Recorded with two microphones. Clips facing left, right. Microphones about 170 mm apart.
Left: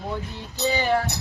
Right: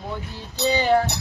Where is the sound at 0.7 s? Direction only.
20° right (ahead or behind).